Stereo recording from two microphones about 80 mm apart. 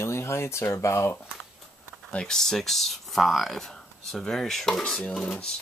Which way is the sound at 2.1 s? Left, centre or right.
Centre.